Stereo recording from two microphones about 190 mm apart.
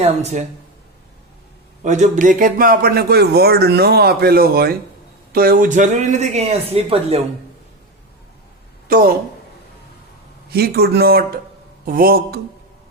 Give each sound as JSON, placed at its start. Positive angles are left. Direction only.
{"t": 0.0, "sound": "speech", "side_deg": -35}
{"t": 1.8, "sound": "speech", "side_deg": -40}
{"t": 8.9, "sound": "speech", "side_deg": -50}
{"t": 10.5, "sound": "speech", "side_deg": -55}